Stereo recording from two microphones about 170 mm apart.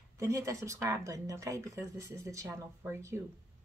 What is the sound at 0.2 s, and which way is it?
Speech, 15° right (ahead or behind).